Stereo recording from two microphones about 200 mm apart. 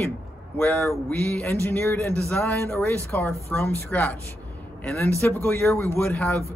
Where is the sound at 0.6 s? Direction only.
10° left (ahead or behind).